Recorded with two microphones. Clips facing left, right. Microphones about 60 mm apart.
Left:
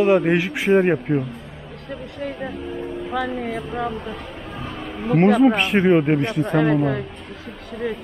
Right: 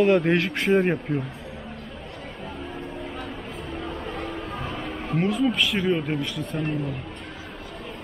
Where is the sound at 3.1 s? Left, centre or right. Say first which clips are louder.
Left 10 dB; left.